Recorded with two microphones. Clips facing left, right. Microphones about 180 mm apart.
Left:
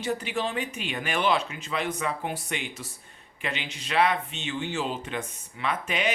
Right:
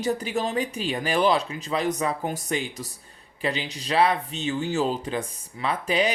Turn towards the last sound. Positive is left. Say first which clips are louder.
# right 4 dB
turn(degrees=-35)  # may be behind; listen again after turning